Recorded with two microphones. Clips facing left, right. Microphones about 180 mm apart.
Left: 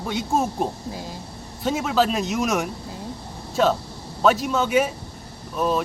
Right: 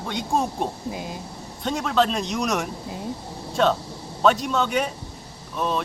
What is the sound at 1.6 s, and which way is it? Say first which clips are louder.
A man's voice: left 1 dB; 5° left (ahead or behind).